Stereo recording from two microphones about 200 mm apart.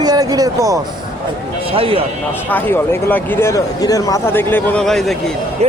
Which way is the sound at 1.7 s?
30° right (ahead or behind).